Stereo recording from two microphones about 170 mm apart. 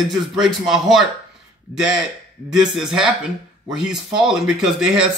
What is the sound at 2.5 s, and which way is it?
A man's voice, 5° right (ahead or behind).